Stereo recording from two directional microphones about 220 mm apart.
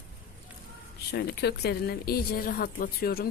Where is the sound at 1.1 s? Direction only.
50° left (ahead or behind).